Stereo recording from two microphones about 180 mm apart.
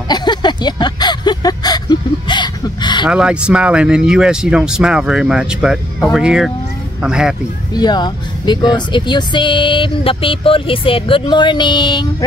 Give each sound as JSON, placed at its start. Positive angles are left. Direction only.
{"t": 0.1, "sound": "a sound", "side_deg": 25}
{"t": 3.1, "sound": "speech", "side_deg": -5}
{"t": 7.7, "sound": "speech", "side_deg": 25}